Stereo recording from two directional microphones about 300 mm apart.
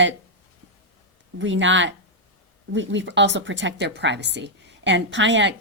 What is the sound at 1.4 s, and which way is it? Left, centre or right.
Speech, right.